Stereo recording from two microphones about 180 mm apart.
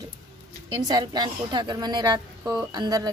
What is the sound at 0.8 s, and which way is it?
Mantra, 25° right (ahead or behind).